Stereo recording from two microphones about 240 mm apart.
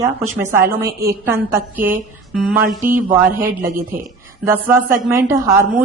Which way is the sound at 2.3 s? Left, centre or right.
Centre.